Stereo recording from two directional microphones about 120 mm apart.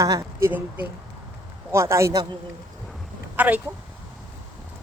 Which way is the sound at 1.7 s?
25° right (ahead or behind).